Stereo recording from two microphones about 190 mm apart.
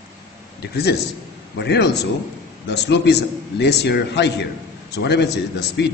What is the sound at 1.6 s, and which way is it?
A man's voice, 60° left (ahead or behind).